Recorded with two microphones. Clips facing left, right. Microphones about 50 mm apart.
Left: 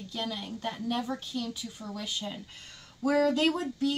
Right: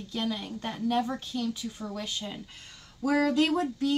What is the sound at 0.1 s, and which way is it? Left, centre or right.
Speech, centre.